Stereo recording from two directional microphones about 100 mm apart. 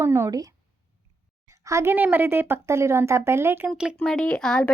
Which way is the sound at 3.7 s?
10° right (ahead or behind).